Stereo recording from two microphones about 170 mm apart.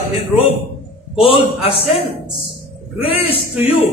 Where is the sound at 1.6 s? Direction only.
35° left (ahead or behind).